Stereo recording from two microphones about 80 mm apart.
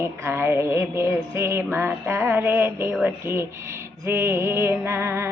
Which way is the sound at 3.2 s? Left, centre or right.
Right.